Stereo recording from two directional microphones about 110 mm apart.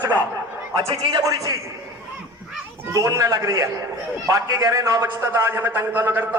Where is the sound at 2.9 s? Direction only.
35° right (ahead or behind).